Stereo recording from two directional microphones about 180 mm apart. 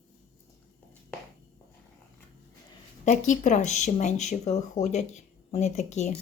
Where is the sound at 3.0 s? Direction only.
40° left (ahead or behind).